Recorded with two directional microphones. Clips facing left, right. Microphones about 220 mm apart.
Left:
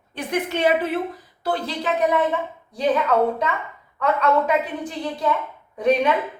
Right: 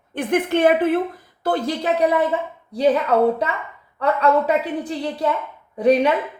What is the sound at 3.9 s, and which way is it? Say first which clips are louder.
Speech: right 2 dB; 35° right (ahead or behind).